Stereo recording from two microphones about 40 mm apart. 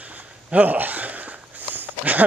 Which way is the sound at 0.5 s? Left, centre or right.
Right.